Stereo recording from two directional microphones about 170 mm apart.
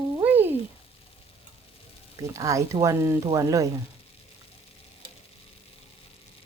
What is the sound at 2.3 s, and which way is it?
Speech, 20° right (ahead or behind).